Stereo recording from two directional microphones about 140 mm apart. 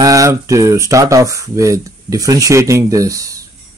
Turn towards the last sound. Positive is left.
turn(degrees=-25)  # may be behind; listen again after turning